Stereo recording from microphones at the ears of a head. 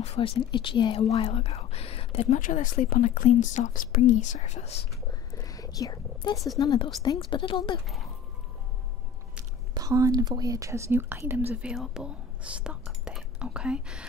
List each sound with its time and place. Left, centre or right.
0.0 s speech: left
9.8 s speech: right
11.3 s speech: centre